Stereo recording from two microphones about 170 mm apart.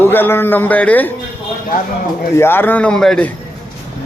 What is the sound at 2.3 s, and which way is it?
Speech, 15° left (ahead or behind).